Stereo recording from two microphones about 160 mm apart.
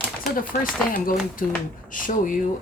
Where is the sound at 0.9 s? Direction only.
60° left (ahead or behind).